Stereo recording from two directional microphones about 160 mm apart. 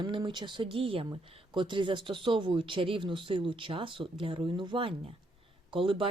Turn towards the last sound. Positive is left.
turn(degrees=-35)  # may be behind; listen again after turning